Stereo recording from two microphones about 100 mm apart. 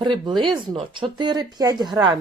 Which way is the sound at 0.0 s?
50° right (ahead or behind).